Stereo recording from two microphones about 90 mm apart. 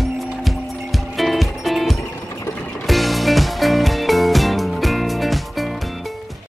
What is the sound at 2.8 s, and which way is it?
Music, centre (ahead or behind).